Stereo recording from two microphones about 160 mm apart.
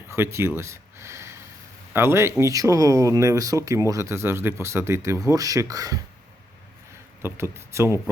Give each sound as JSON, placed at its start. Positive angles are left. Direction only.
{"t": 0.1, "sound": "speech", "side_deg": -15}
{"t": 7.2, "sound": "speech", "side_deg": -15}